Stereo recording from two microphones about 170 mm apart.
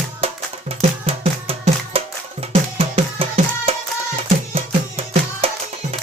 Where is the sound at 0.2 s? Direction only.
35° right (ahead or behind).